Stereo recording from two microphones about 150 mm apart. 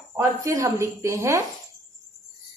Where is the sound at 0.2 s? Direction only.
20° right (ahead or behind).